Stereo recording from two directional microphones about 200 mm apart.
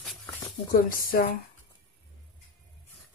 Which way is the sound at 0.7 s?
45° left (ahead or behind).